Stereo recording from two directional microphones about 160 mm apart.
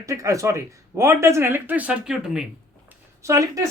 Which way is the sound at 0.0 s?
20° right (ahead or behind).